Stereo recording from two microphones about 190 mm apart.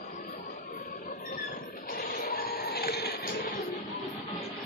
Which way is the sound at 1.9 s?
50° left (ahead or behind).